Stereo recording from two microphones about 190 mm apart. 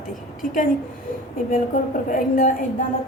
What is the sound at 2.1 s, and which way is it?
Speech, 45° left (ahead or behind).